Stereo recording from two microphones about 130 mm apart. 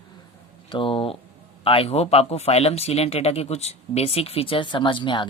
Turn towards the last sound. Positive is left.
turn(degrees=40)  # may be behind; listen again after turning